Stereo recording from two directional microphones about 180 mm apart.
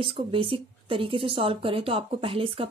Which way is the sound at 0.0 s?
30° right (ahead or behind).